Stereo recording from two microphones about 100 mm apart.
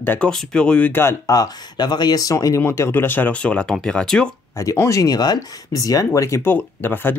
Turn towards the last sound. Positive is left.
turn(degrees=20)  # may be behind; listen again after turning